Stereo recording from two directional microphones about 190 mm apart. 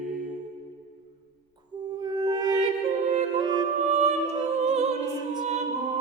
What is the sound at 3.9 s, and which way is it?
Music, 35° right (ahead or behind).